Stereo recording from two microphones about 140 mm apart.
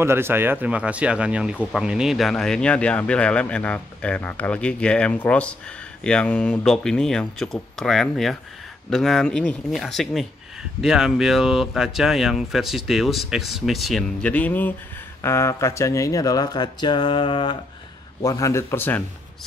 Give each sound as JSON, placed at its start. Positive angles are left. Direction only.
{"t": 0.0, "sound": "speech", "side_deg": -15}
{"t": 18.2, "sound": "speech", "side_deg": 25}